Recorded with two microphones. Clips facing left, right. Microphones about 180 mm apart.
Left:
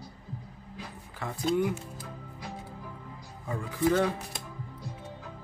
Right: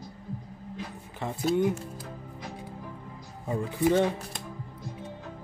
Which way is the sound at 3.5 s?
25° right (ahead or behind).